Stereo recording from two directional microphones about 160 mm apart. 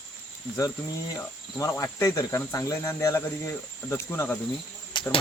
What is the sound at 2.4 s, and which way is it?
Speech, 15° left (ahead or behind).